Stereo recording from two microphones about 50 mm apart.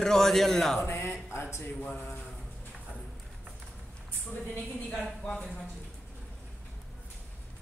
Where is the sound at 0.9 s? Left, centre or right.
Left.